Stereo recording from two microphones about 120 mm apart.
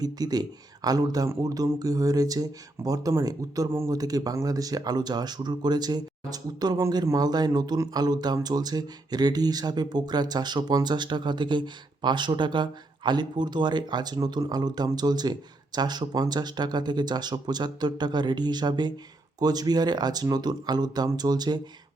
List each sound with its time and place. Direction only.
0.0 s speech: 35° right (ahead or behind)